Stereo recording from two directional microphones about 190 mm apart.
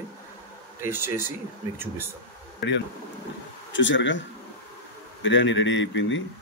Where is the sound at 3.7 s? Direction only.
75° left (ahead or behind).